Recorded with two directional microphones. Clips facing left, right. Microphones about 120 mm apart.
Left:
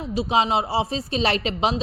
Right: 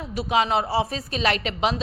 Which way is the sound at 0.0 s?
25° left (ahead or behind).